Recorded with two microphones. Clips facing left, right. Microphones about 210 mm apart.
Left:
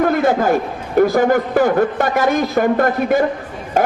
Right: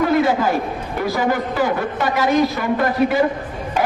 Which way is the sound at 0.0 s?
50° left (ahead or behind).